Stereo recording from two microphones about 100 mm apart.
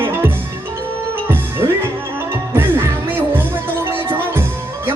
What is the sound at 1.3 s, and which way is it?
Music, 20° right (ahead or behind).